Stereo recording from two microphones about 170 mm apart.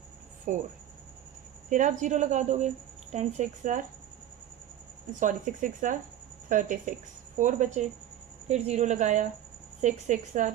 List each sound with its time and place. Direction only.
0.5 s a woman's voice: 50° right (ahead or behind)
1.7 s a woman's voice: 45° right (ahead or behind)
5.2 s a woman's voice: 50° right (ahead or behind)